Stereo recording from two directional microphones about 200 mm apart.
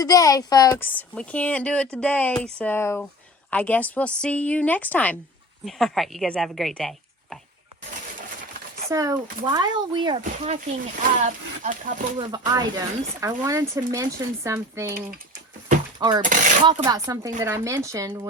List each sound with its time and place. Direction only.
0.0 s speech: 20° left (ahead or behind)
0.9 s a woman's voice: 5° left (ahead or behind)
8.9 s speech: 15° right (ahead or behind)
10.2 s speech: 35° right (ahead or behind)
12.5 s speech: 20° right (ahead or behind)
16.0 s speech: 20° right (ahead or behind)
16.2 s speech: 40° right (ahead or behind)
16.8 s speech: 15° right (ahead or behind)